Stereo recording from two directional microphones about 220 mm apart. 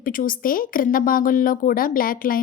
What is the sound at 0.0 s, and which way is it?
A woman's voice, 40° left (ahead or behind).